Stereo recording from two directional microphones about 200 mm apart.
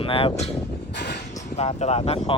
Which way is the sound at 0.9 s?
55° left (ahead or behind).